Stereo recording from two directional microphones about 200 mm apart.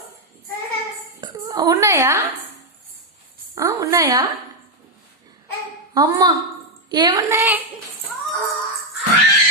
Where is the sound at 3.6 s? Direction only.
15° right (ahead or behind).